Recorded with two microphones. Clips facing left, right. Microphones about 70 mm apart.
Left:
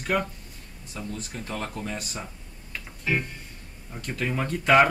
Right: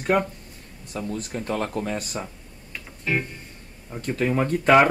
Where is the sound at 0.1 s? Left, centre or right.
Right.